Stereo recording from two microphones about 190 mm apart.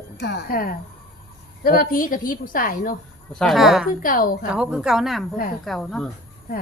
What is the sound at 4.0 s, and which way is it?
Speech, 45° left (ahead or behind).